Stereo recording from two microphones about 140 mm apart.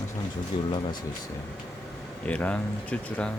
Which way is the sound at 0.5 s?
35° left (ahead or behind).